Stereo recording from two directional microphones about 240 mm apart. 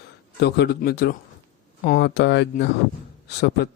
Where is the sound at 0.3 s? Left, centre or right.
Left.